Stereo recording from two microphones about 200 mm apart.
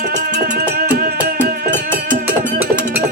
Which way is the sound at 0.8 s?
50° right (ahead or behind).